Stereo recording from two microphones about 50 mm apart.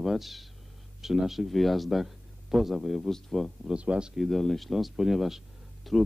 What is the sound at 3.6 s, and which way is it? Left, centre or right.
Speech, right.